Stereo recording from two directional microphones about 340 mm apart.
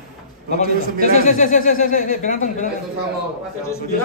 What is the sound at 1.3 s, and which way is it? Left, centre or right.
Speech, left.